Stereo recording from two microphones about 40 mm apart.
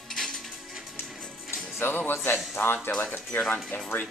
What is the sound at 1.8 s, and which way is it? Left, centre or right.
Speech, left.